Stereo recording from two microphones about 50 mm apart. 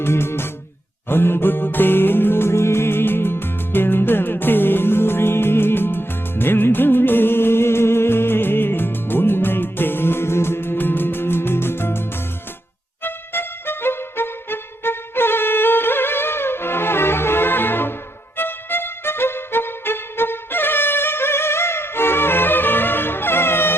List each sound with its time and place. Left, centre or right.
0.0 s music: left